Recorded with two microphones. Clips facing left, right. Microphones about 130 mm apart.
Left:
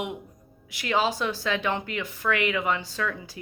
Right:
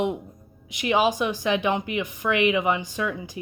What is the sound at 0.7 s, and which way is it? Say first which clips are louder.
A woman's voice: right 4 dB; 20° right (ahead or behind).